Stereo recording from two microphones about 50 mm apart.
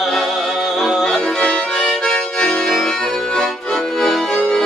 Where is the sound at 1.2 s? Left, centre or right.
Centre.